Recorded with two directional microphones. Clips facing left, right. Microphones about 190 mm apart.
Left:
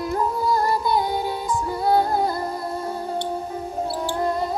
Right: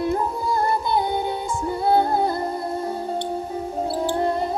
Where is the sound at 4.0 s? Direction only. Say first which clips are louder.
Right 2 dB; 25° right (ahead or behind).